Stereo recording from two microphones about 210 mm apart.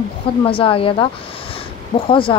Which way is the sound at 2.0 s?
25° left (ahead or behind).